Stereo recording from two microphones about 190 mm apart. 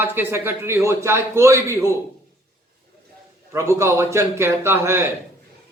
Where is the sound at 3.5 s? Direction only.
15° right (ahead or behind).